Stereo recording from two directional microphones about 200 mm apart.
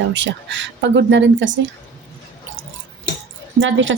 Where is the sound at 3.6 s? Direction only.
70° right (ahead or behind).